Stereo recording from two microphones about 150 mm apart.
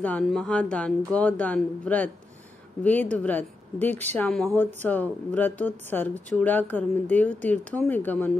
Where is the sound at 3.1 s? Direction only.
10° left (ahead or behind).